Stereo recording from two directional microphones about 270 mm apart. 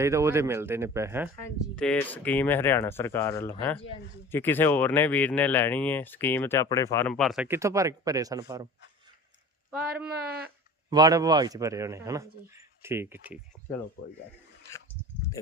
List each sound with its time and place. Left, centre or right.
0.0 s speech: centre
1.4 s speech: centre
10.1 s speech: right
10.8 s speech: centre